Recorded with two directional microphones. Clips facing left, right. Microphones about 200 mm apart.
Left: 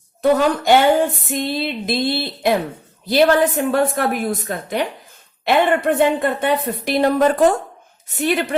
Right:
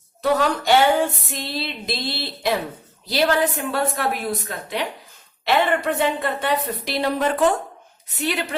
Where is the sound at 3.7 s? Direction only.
50° left (ahead or behind).